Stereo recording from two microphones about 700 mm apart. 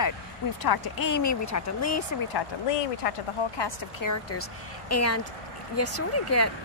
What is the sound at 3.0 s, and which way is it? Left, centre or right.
Speech, left.